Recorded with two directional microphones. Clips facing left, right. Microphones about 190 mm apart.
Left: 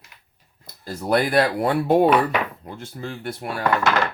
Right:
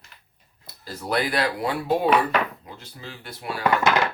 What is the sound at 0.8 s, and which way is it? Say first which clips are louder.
Speech: left 5 dB; 50° left (ahead or behind).